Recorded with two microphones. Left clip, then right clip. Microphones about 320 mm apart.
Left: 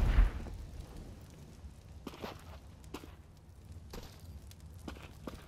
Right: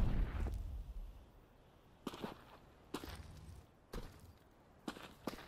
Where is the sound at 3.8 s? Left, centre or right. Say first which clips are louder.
Left 2 dB; centre.